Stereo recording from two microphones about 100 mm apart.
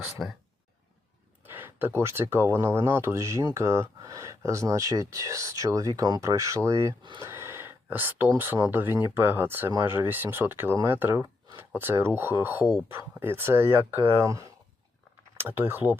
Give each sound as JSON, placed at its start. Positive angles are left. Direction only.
{"t": 0.2, "sound": "speech", "side_deg": 0}
{"t": 1.5, "sound": "speech", "side_deg": -20}
{"t": 7.2, "sound": "a sound", "side_deg": -25}
{"t": 8.7, "sound": "speech", "side_deg": -25}
{"t": 14.3, "sound": "speech", "side_deg": -35}
{"t": 15.4, "sound": "speech", "side_deg": -20}